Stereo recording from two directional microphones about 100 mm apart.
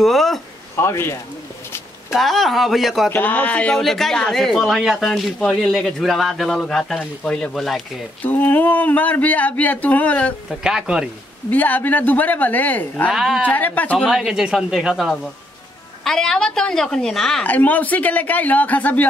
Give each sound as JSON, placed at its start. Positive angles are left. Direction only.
{"t": 0.0, "sound": "a man's voice", "side_deg": 0}
{"t": 0.7, "sound": "a man's voice", "side_deg": 25}
{"t": 2.1, "sound": "a man's voice", "side_deg": 0}
{"t": 3.1, "sound": "a man's voice", "side_deg": 15}
{"t": 8.2, "sound": "speech", "side_deg": 20}
{"t": 10.5, "sound": "speech", "side_deg": -5}
{"t": 11.5, "sound": "speech", "side_deg": 15}
{"t": 13.1, "sound": "a man's voice", "side_deg": -5}
{"t": 13.5, "sound": "speech", "side_deg": 15}
{"t": 13.9, "sound": "a man's voice", "side_deg": 0}
{"t": 17.4, "sound": "speech", "side_deg": 15}